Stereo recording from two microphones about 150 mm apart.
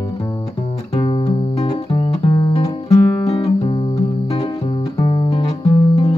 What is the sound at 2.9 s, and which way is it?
Guitar, 40° left (ahead or behind).